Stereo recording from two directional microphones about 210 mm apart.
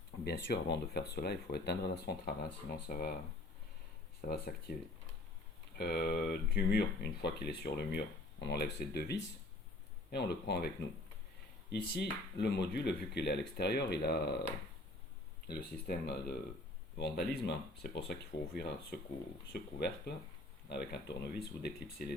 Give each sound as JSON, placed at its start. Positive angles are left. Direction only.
{"t": 0.3, "sound": "speech", "side_deg": 50}
{"t": 4.3, "sound": "speech", "side_deg": 45}
{"t": 11.7, "sound": "speech", "side_deg": 50}
{"t": 15.4, "sound": "speech", "side_deg": 50}